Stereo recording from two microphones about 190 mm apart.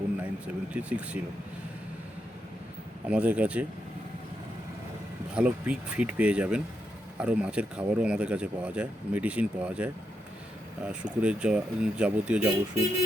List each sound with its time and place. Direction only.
0.2 s speech: 5° right (ahead or behind)
3.1 s speech: 5° right (ahead or behind)
5.3 s speech: 5° right (ahead or behind)